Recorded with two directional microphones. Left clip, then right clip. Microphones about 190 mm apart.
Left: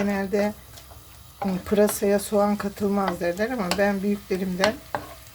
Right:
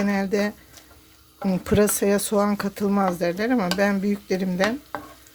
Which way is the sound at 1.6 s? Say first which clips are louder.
Even; 50° right (ahead or behind).